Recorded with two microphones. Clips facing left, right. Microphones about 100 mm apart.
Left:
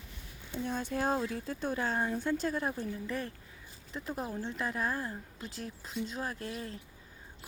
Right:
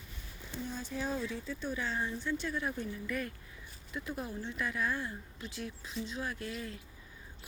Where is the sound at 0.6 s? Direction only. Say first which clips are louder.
Left 5 dB; 60° left (ahead or behind).